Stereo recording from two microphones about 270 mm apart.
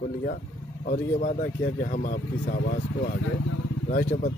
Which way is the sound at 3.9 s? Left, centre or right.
Left.